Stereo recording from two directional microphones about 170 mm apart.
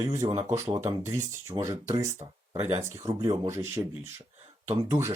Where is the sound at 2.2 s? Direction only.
35° right (ahead or behind).